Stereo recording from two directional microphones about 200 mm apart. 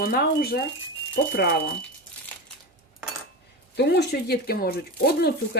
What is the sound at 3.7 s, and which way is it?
Speech, 55° left (ahead or behind).